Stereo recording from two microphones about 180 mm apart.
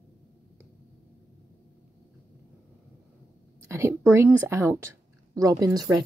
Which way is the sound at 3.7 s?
15° right (ahead or behind).